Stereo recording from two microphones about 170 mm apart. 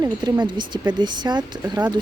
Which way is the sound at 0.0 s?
25° right (ahead or behind).